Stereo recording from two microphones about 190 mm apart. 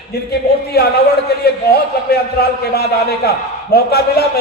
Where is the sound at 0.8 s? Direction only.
55° left (ahead or behind).